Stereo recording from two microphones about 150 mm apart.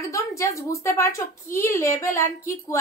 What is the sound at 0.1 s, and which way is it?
A woman's voice, 20° left (ahead or behind).